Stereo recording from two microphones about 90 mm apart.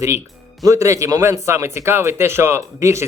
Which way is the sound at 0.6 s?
40° right (ahead or behind).